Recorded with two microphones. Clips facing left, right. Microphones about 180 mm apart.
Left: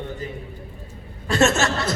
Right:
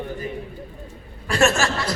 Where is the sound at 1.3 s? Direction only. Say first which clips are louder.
Left 1 dB; 20° left (ahead or behind).